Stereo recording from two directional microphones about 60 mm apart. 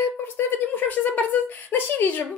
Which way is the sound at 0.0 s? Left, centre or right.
Left.